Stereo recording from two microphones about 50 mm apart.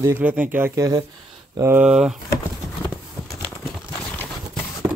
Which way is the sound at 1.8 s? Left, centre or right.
Centre.